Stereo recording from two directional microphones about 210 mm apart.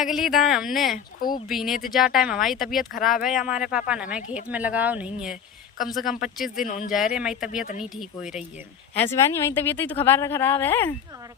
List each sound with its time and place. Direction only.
0.0 s speech: centre (ahead or behind)
6.6 s speech: 40° left (ahead or behind)
6.9 s speech: 5° right (ahead or behind)
7.5 s speech: 40° left (ahead or behind)
7.8 s speech: centre (ahead or behind)
9.0 s speech: 10° left (ahead or behind)